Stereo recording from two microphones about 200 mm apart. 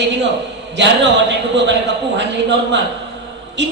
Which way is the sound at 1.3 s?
60° right (ahead or behind).